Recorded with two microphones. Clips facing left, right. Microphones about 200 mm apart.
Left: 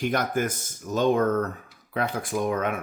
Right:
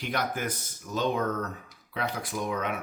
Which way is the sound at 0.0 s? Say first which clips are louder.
Left 6 dB; 50° left (ahead or behind).